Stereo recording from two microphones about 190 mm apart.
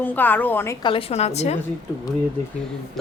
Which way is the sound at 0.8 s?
30° left (ahead or behind).